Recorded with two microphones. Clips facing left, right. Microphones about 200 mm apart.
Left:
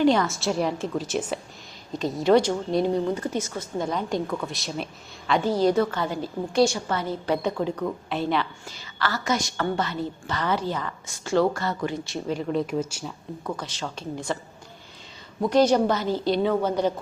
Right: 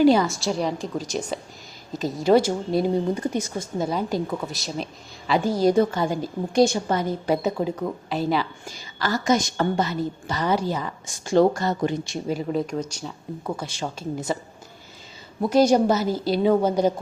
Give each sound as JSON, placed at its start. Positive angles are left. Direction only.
{"t": 0.0, "sound": "a woman's voice", "side_deg": -5}
{"t": 8.7, "sound": "a woman's voice", "side_deg": -15}
{"t": 12.5, "sound": "a woman's voice", "side_deg": 0}
{"t": 13.6, "sound": "a woman's voice", "side_deg": -10}
{"t": 15.4, "sound": "a woman's voice", "side_deg": -10}